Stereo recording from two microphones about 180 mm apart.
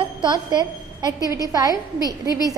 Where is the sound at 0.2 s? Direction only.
25° right (ahead or behind).